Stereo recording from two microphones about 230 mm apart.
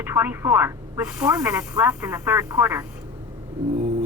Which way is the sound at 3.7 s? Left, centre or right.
Right.